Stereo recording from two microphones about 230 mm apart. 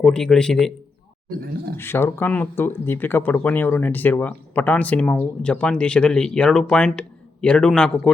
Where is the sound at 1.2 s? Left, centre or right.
Right.